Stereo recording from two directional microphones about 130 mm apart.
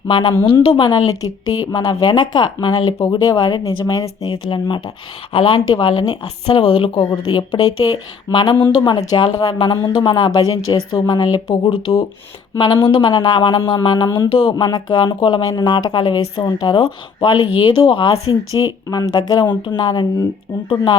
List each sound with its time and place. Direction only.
0.1 s speech: 40° left (ahead or behind); by 4.3 s 25° left (ahead or behind)
4.3 s speech: 40° left (ahead or behind)
6.2 s speech: 50° left (ahead or behind); by 9.6 s 30° left (ahead or behind)
9.8 s speech: 40° left (ahead or behind)